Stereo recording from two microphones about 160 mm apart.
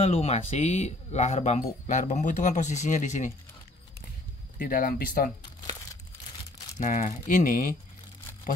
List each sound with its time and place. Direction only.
0.0 s speech: 40° left (ahead or behind)
4.6 s speech: 65° left (ahead or behind)
6.8 s speech: 50° left (ahead or behind)